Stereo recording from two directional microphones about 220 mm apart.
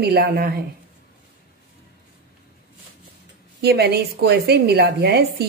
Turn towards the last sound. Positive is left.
turn(degrees=-45)  # may be behind; listen again after turning